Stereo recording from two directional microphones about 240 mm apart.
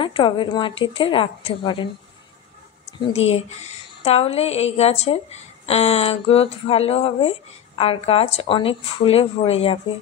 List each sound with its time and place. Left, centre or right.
0.0 s a woman's voice: left
3.1 s a woman's voice: left